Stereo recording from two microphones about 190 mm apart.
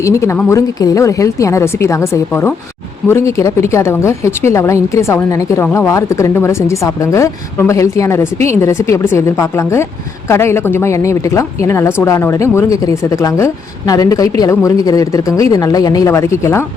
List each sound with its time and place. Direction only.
0.0 s a woman's voice: 15° left (ahead or behind)